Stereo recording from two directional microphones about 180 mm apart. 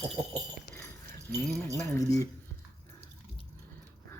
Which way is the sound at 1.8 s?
15° left (ahead or behind).